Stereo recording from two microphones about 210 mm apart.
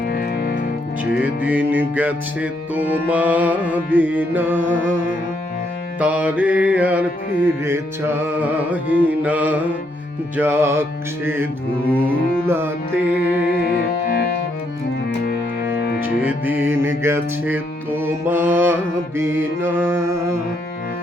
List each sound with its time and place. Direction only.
0.1 s music: 45° left (ahead or behind)
1.2 s music: 5° right (ahead or behind)
6.0 s music: 5° right (ahead or behind)
12.5 s music: 10° right (ahead or behind)
13.6 s music: 45° left (ahead or behind)
16.2 s music: 10° right (ahead or behind)